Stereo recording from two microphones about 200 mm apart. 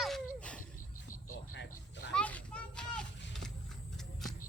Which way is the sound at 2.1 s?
5° left (ahead or behind).